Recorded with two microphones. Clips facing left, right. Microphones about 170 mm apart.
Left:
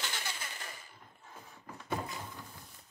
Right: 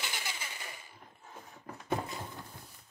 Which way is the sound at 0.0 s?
10° right (ahead or behind).